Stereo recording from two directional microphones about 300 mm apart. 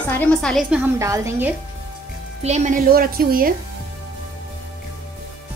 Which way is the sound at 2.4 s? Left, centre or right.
Right.